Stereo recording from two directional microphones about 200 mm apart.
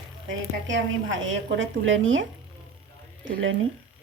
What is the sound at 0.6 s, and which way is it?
A woman's voice, 70° right (ahead or behind).